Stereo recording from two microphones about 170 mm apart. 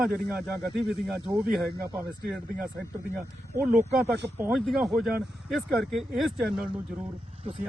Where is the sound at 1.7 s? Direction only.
20° right (ahead or behind).